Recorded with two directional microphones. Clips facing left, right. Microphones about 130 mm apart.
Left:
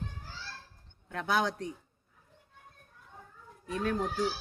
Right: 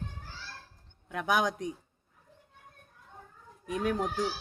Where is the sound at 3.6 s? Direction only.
15° right (ahead or behind).